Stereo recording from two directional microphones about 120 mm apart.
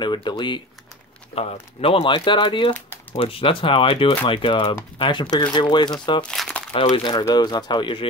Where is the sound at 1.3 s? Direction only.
55° left (ahead or behind).